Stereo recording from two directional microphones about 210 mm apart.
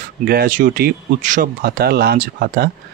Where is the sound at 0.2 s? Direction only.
45° right (ahead or behind).